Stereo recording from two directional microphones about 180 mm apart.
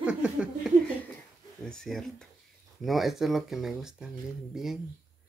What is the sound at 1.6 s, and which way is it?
Speech, 5° left (ahead or behind).